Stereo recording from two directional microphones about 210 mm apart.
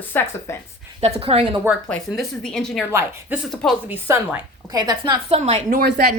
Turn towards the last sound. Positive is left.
turn(degrees=-45)  # may be behind; listen again after turning